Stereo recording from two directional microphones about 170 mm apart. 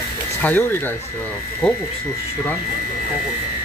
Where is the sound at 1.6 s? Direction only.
5° left (ahead or behind).